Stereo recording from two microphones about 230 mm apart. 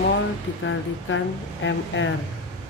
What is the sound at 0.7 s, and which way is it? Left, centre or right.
Speech, left.